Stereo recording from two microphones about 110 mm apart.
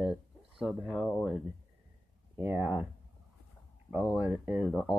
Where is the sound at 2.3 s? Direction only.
20° right (ahead or behind).